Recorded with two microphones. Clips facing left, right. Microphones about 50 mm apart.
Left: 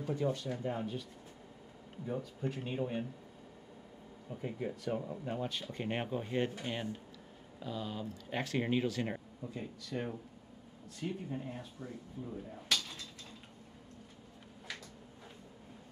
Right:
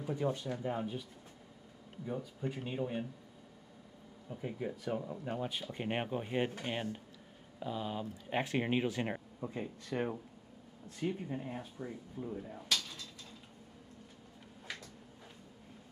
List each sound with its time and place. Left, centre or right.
0.0 s speech: centre
2.0 s speech: centre
4.3 s speech: centre
12.4 s speech: centre